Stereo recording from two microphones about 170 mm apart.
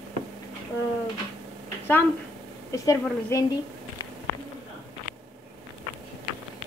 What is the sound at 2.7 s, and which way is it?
Speech, 20° left (ahead or behind).